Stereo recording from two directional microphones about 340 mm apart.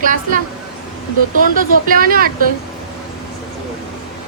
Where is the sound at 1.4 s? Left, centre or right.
Right.